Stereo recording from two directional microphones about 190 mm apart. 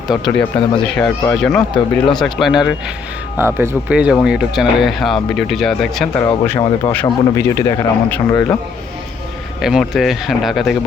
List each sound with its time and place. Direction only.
0.1 s speech: centre (ahead or behind)
1.7 s speech: 25° left (ahead or behind)
2.2 s speech: centre (ahead or behind)
3.3 s speech: 10° right (ahead or behind)
6.1 s speech: 10° left (ahead or behind)
9.6 s speech: centre (ahead or behind)